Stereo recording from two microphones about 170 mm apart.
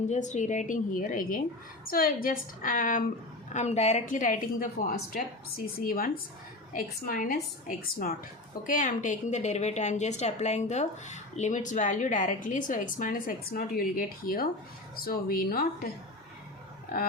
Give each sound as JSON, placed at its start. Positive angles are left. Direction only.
{"t": 0.1, "sound": "a woman's voice", "side_deg": 45}
{"t": 3.5, "sound": "a woman's voice", "side_deg": 40}
{"t": 8.6, "sound": "a woman's voice", "side_deg": 50}